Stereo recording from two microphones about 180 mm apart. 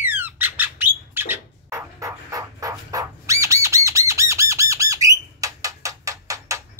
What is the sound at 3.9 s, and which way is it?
Squawk, 15° right (ahead or behind).